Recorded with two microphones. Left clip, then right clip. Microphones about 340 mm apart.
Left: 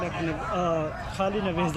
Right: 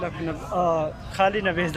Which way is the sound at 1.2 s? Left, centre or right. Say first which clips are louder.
Right 6 dB; right.